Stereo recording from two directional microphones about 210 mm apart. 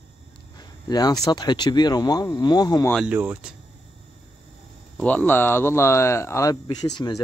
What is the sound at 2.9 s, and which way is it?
Speech, 5° right (ahead or behind).